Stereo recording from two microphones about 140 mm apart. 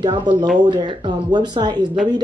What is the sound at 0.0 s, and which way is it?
Speech, 30° right (ahead or behind).